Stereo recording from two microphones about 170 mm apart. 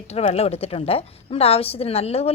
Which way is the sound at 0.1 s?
40° left (ahead or behind).